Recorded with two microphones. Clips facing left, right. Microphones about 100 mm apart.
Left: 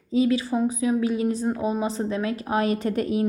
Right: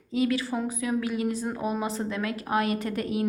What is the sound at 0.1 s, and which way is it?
A woman's voice, 25° left (ahead or behind).